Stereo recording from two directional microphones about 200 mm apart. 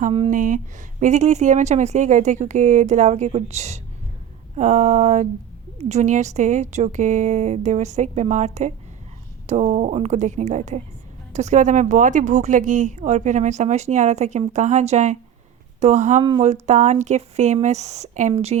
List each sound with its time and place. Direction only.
0.0 s speech: 25° right (ahead or behind)
0.3 s a woman's voice: 40° right (ahead or behind)